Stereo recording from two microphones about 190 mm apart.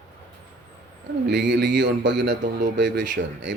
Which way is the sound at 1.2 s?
60° right (ahead or behind).